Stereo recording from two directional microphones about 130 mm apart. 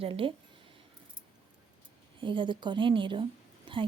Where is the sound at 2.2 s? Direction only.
40° right (ahead or behind).